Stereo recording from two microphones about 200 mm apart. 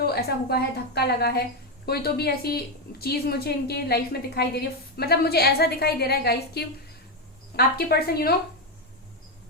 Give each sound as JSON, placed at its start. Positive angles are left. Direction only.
{"t": 0.0, "sound": "a woman's voice", "side_deg": 50}